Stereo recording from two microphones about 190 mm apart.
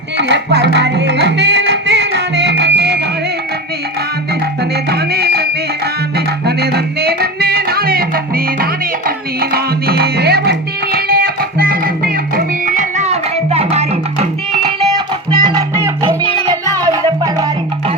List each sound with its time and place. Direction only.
0.2 s music: 65° right (ahead or behind)
4.9 s music: 55° right (ahead or behind); by 14.3 s 35° right (ahead or behind)
15.3 s music: 20° right (ahead or behind)